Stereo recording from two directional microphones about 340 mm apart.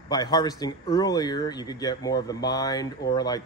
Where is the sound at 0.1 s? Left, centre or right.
Centre.